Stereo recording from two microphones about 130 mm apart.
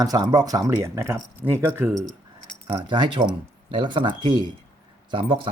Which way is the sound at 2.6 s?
35° right (ahead or behind).